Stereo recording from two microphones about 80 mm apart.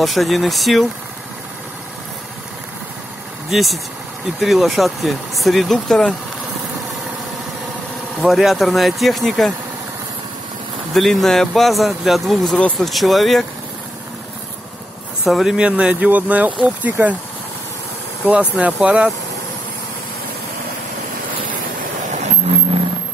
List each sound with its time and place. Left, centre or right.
0.0 s speech: centre
3.4 s speech: centre
8.2 s speech: centre
10.9 s speech: centre
15.2 s speech: centre
15.5 s speech: centre
18.2 s speech: centre